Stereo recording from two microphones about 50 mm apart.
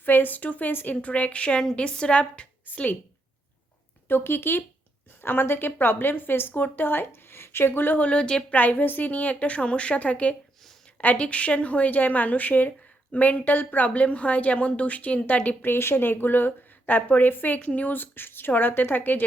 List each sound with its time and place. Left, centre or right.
0.0 s speech: left
0.7 s speech: left
1.0 s a woman's voice: left
4.1 s speech: left
8.0 s a woman's voice: left
8.5 s a woman's voice: left
15.6 s speech: left